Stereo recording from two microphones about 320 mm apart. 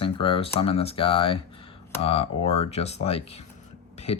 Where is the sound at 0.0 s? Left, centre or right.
Centre.